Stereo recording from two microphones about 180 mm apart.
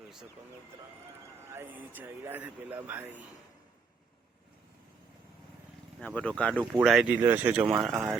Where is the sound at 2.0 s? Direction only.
10° right (ahead or behind).